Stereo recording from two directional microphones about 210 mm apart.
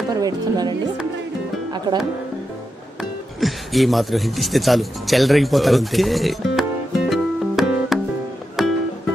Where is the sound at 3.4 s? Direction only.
Centre (ahead or behind).